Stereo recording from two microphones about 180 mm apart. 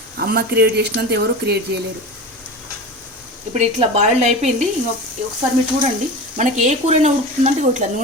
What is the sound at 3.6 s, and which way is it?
Speech, 40° right (ahead or behind).